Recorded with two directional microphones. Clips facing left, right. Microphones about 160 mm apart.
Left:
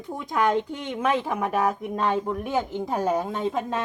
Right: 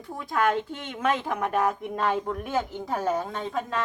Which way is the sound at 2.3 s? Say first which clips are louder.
Left 2 dB; 15° left (ahead or behind).